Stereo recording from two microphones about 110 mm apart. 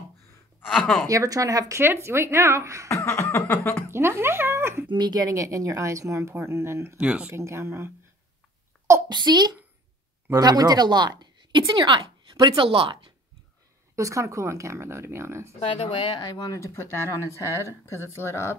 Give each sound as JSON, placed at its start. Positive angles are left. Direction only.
{"t": 0.7, "sound": "speech", "side_deg": 5}
{"t": 1.0, "sound": "speech", "side_deg": -30}
{"t": 2.9, "sound": "speech", "side_deg": 25}
{"t": 3.9, "sound": "speech", "side_deg": -20}
{"t": 4.8, "sound": "speech", "side_deg": -40}
{"t": 7.0, "sound": "speech", "side_deg": -10}
{"t": 7.3, "sound": "speech", "side_deg": -25}
{"t": 9.1, "sound": "a child's voice", "side_deg": -40}
{"t": 13.9, "sound": "speech", "side_deg": -30}
{"t": 15.6, "sound": "speech", "side_deg": 55}
{"t": 16.2, "sound": "speech", "side_deg": 35}